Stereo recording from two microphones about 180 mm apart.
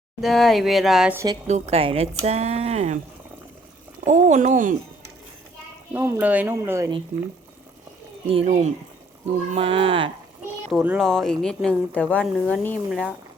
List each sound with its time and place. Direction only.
0.2 s speech: centre (ahead or behind)
1.1 s speech: 15° right (ahead or behind)
1.5 s speech: 35° right (ahead or behind)
4.0 s speech: 40° right (ahead or behind)
5.9 s speech: 10° right (ahead or behind)
7.1 s speech: 45° right (ahead or behind)
8.3 s speech: 35° right (ahead or behind)
10.7 s speech: 5° right (ahead or behind)